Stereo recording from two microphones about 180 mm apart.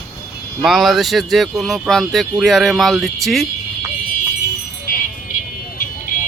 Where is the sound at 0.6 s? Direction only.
Centre (ahead or behind).